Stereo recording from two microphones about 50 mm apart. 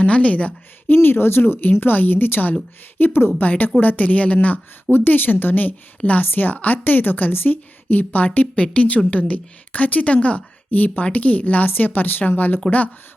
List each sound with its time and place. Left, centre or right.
0.0 s a woman's voice: left
0.9 s a woman's voice: left
3.4 s a woman's voice: left